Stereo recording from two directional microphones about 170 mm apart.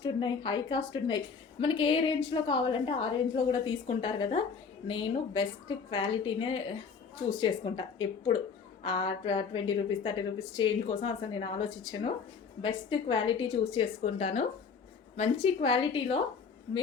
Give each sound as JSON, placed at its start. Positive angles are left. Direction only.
{"t": 0.0, "sound": "a woman's voice", "side_deg": 25}
{"t": 14.0, "sound": "a woman's voice", "side_deg": 40}